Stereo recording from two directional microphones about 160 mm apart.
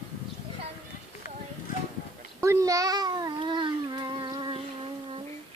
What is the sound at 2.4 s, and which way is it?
Babbling, 20° right (ahead or behind).